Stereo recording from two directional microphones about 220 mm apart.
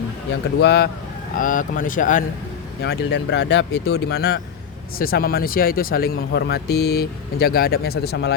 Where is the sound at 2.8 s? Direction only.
50° left (ahead or behind).